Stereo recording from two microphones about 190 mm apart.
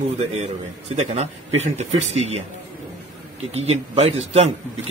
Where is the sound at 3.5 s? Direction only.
35° right (ahead or behind).